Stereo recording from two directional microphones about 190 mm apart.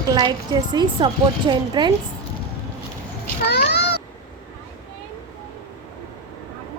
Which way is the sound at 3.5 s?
60° left (ahead or behind).